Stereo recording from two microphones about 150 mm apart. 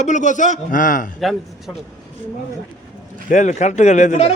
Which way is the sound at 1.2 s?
Centre (ahead or behind).